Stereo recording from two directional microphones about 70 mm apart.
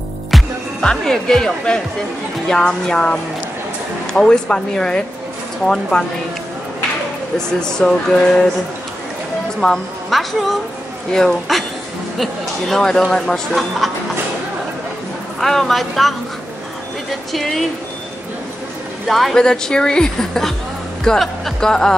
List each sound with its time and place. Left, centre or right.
0.3 s music: centre
0.8 s speech: centre
7.8 s speech: centre
9.6 s speech: centre
15.4 s speech: centre
17.3 s speech: centre
19.0 s speech: centre